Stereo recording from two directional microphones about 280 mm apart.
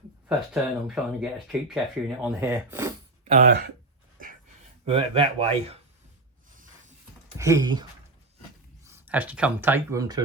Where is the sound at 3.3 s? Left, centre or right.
Right.